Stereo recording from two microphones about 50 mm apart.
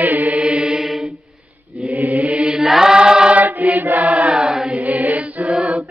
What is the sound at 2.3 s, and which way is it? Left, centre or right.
Mantra, centre.